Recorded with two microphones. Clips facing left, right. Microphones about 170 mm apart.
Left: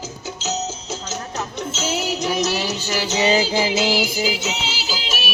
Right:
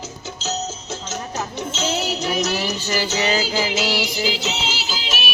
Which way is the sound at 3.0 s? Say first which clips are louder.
Left 6 dB; 20° left (ahead or behind).